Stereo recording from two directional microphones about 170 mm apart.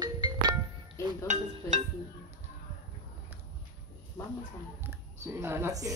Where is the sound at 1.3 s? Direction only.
45° right (ahead or behind).